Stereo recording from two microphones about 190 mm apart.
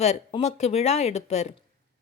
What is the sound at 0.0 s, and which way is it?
Speech, 35° left (ahead or behind).